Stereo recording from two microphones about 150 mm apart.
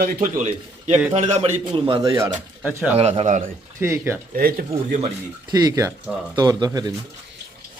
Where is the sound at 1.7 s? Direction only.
30° right (ahead or behind).